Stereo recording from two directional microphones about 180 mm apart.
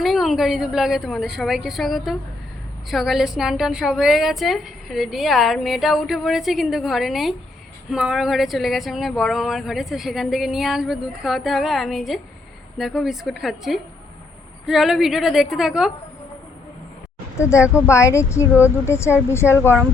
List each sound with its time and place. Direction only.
0.0 s a woman's voice: centre (ahead or behind)
17.3 s speech: 15° left (ahead or behind)